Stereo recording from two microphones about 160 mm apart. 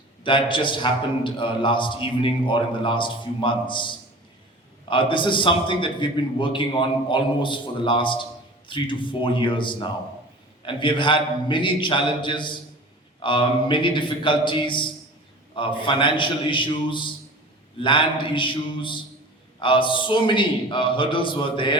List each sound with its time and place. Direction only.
0.3 s a man's voice: 30° left (ahead or behind)